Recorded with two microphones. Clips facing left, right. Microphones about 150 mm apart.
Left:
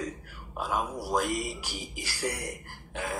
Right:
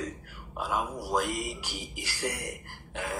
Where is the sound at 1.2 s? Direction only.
15° right (ahead or behind).